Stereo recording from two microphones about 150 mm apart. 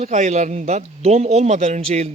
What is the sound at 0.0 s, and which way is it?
A man's voice, 50° right (ahead or behind).